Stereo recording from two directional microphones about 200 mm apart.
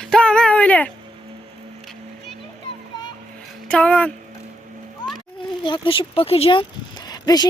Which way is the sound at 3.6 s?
5° left (ahead or behind).